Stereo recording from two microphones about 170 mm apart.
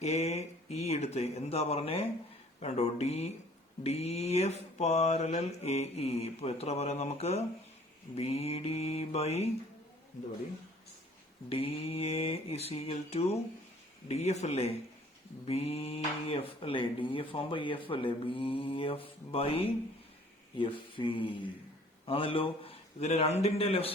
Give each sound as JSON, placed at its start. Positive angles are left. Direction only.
{"t": 0.0, "sound": "speech", "side_deg": 40}
{"t": 11.4, "sound": "speech", "side_deg": 35}
{"t": 20.6, "sound": "a sound", "side_deg": 30}
{"t": 22.0, "sound": "a man's voice", "side_deg": 30}